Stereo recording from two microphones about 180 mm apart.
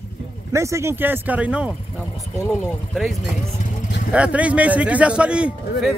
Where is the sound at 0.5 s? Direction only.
15° right (ahead or behind).